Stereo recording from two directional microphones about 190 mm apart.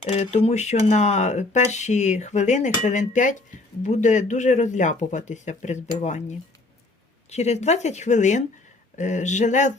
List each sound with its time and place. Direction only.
0.0 s speech: 35° left (ahead or behind)